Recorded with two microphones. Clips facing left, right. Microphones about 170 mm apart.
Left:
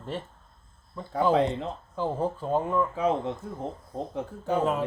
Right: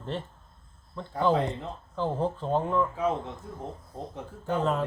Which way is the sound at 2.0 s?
10° left (ahead or behind).